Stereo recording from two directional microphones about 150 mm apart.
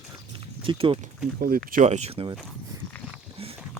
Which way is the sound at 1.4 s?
80° right.